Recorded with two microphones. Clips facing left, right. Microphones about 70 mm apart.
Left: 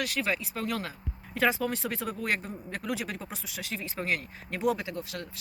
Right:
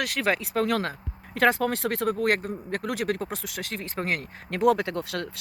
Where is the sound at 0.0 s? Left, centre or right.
Right.